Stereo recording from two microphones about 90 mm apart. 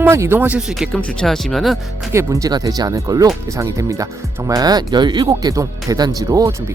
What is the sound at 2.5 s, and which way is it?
Speech, 45° right (ahead or behind).